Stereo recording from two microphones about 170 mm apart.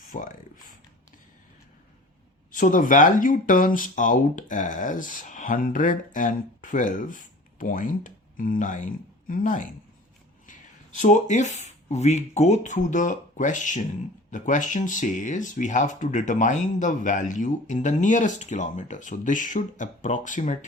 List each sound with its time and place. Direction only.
0.1 s speech: 50° left (ahead or behind)
2.5 s speech: 55° left (ahead or behind)
11.0 s speech: 45° left (ahead or behind)